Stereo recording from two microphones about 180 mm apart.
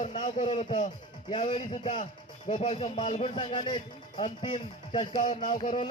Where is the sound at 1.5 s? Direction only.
30° left (ahead or behind).